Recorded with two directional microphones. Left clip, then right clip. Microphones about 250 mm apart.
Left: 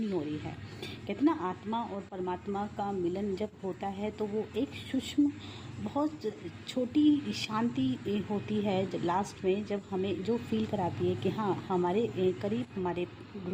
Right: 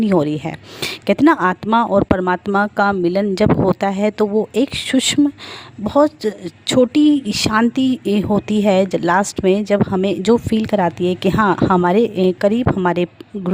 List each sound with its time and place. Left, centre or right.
0.1 s speech: right